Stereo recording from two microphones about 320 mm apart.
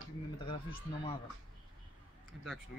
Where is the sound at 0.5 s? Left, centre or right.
Centre.